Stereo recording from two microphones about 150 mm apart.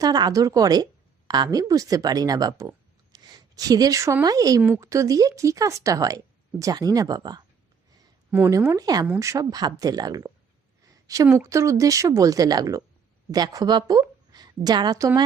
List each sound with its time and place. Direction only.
0.0 s a woman's voice: 25° right (ahead or behind)